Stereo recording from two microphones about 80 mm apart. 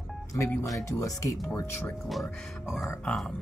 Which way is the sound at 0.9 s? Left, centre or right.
Left.